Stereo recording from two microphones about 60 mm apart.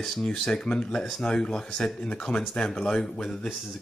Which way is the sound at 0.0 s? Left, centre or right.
Centre.